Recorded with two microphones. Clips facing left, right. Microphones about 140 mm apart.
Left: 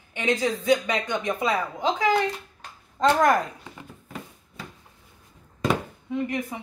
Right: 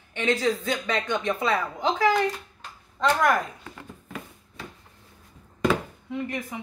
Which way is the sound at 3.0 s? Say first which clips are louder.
Left 3 dB; 40° left (ahead or behind).